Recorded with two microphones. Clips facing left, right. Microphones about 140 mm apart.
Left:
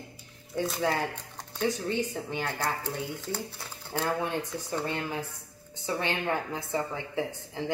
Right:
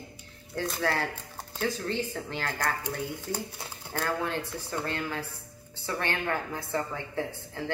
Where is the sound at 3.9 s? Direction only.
15° left (ahead or behind).